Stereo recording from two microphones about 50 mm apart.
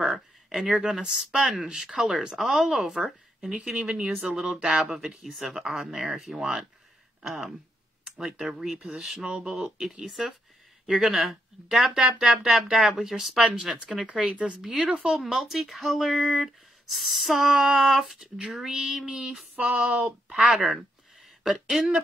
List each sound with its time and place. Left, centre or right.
0.7 s speech: centre
0.9 s speech: centre
1.7 s speech: centre
8.7 s speech: right
9.5 s speech: centre
14.0 s speech: centre
19.5 s speech: right
20.4 s speech: centre